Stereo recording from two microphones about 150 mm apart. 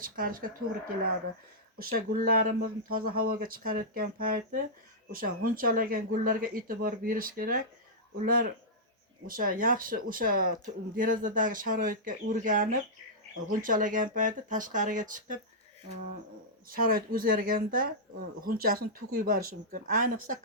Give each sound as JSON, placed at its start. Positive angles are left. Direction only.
{"t": 0.0, "sound": "speech", "side_deg": -70}
{"t": 1.8, "sound": "speech", "side_deg": -75}
{"t": 16.6, "sound": "speech", "side_deg": -70}